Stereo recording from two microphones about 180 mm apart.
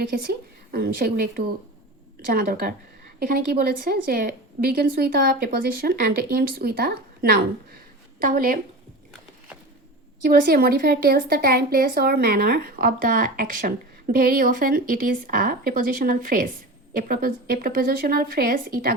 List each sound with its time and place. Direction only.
0.1 s a woman's voice: 60° right (ahead or behind)
2.3 s a woman's voice: 55° right (ahead or behind)
10.2 s a woman's voice: 55° right (ahead or behind)